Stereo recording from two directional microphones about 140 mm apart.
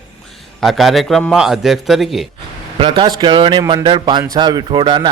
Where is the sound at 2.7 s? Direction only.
40° right (ahead or behind).